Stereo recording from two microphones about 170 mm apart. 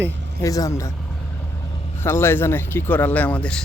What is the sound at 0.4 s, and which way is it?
Speech, 20° left (ahead or behind).